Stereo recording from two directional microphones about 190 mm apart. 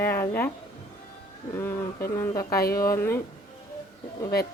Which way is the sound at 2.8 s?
15° left (ahead or behind).